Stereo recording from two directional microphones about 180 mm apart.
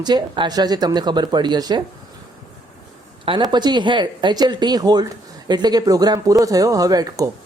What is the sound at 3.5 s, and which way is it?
Speech, 25° right (ahead or behind).